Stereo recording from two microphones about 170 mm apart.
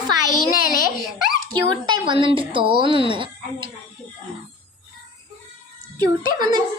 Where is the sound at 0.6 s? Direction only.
55° left (ahead or behind).